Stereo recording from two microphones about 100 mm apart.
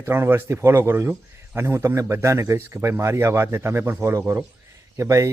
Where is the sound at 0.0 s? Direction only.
20° right (ahead or behind).